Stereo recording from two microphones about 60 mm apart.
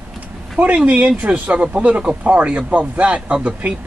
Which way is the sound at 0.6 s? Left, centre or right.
Right.